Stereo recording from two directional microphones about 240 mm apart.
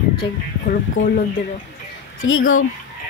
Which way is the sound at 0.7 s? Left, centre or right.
Left.